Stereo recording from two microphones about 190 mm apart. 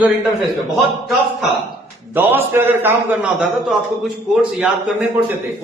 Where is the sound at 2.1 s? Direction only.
10° right (ahead or behind).